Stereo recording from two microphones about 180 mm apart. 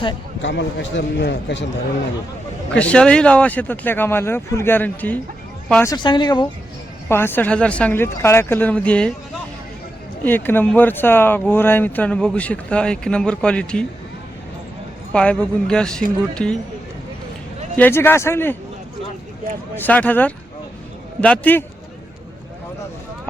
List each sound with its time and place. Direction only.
0.4 s a man's voice: 85° left
2.7 s speech: 5° left (ahead or behind)
5.8 s speech: 20° left (ahead or behind)
7.1 s speech: 10° left (ahead or behind)
10.2 s speech: 10° left (ahead or behind)
15.1 s speech: 5° left (ahead or behind)
17.7 s speech: 10° left (ahead or behind)
19.7 s speech: 10° left (ahead or behind)